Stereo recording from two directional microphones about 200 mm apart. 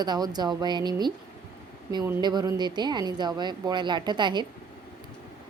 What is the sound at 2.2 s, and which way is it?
A woman's voice, 20° right (ahead or behind).